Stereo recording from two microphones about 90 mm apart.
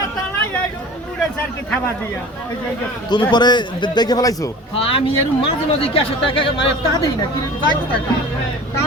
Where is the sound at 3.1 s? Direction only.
55° left (ahead or behind).